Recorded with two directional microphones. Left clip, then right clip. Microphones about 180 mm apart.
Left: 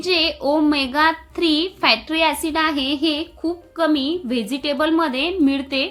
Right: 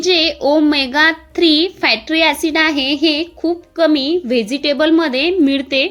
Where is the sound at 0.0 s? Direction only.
15° right (ahead or behind).